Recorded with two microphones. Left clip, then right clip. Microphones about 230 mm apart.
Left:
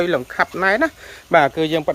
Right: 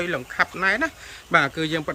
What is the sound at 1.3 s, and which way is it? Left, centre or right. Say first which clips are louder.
Speech: left 6 dB; centre.